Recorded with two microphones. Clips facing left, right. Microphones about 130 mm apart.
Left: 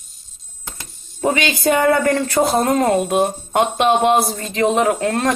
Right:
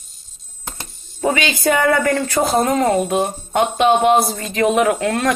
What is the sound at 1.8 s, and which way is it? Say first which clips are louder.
Speech: left 2 dB; 25° left (ahead or behind).